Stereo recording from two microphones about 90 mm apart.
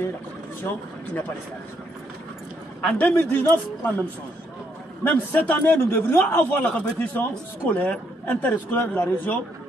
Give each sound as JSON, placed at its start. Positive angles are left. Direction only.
{"t": 2.8, "sound": "a man's voice", "side_deg": 15}
{"t": 5.0, "sound": "a man's voice", "side_deg": 20}